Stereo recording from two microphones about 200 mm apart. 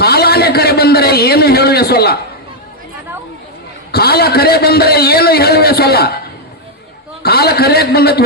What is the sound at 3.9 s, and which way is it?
A man's voice, 50° left (ahead or behind).